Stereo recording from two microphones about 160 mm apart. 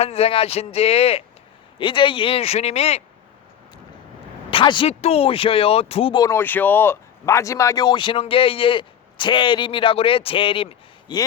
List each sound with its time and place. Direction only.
0.0 s speech: 40° left (ahead or behind)
4.5 s speech: 30° left (ahead or behind)
4.9 s speech: 40° left (ahead or behind)
6.2 s speech: 15° left (ahead or behind); by 11.2 s 35° left (ahead or behind)